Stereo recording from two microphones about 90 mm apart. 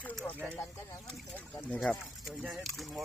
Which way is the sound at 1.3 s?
20° left (ahead or behind).